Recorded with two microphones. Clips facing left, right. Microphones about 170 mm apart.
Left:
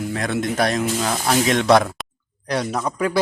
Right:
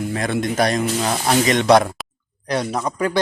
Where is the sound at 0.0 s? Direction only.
Centre (ahead or behind).